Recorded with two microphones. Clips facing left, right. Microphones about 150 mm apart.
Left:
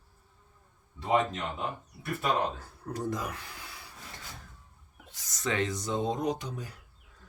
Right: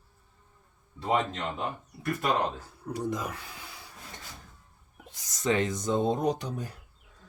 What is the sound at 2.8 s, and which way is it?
Speech, 10° right (ahead or behind).